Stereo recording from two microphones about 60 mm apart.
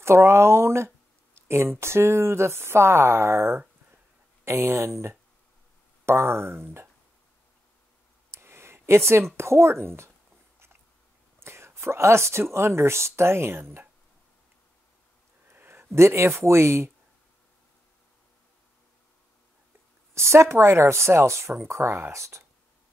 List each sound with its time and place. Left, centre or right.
0.0 s speech: right
8.3 s speech: right
11.3 s whispering: right
12.5 s speech: right
15.5 s speech: right
20.2 s speech: right